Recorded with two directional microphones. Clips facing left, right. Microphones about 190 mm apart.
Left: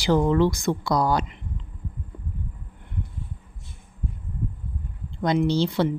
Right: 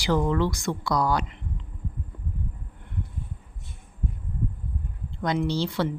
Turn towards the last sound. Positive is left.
turn(degrees=20)  # may be behind; listen again after turning